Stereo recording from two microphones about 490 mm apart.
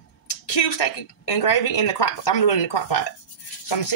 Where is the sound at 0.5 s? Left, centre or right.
Left.